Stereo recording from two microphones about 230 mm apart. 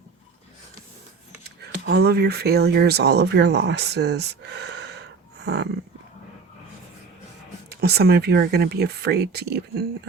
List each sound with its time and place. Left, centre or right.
1.6 s speech: right
5.4 s a sound: right
7.7 s speech: right